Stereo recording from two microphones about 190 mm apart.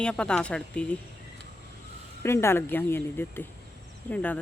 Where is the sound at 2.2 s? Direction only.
15° left (ahead or behind).